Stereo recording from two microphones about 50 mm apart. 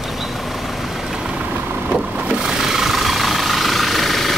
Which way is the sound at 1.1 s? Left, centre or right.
Centre.